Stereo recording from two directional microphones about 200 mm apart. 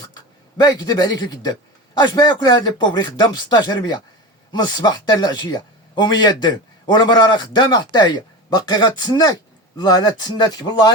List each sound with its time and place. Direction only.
0.0 s a man's voice: 20° left (ahead or behind)